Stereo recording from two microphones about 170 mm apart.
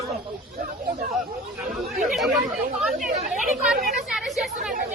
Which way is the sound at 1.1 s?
Centre (ahead or behind).